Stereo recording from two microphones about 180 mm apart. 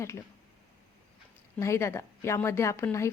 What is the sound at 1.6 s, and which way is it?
A woman's voice, 15° left (ahead or behind).